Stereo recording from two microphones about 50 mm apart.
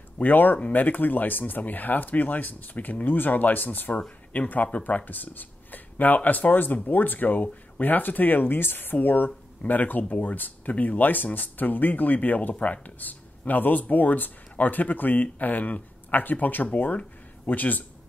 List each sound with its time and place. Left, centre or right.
0.2 s speech: left